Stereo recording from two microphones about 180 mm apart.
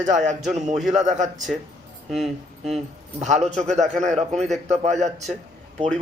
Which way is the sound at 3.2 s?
40° right (ahead or behind).